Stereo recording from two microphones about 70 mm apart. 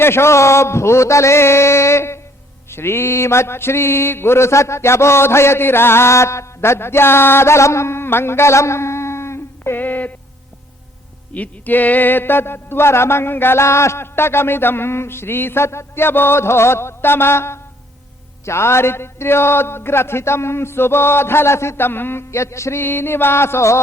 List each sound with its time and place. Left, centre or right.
0.0 s music: left
11.3 s music: left
22.8 s music: left